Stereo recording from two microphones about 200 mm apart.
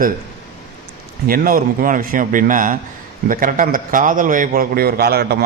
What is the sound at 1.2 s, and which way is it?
A man's voice, 45° right (ahead or behind).